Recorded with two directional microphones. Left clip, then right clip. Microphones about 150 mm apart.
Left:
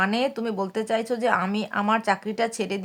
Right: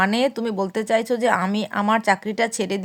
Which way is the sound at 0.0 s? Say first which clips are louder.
Right 4 dB; 30° right (ahead or behind).